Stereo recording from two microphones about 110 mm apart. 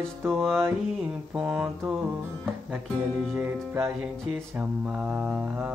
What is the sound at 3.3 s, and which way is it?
Music, 20° right (ahead or behind).